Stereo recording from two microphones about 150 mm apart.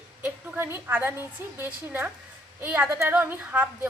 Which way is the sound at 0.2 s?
10° right (ahead or behind).